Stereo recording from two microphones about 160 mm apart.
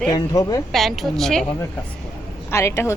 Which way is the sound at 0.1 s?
20° left (ahead or behind).